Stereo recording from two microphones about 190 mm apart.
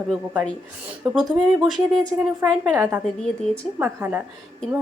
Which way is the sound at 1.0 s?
Centre (ahead or behind).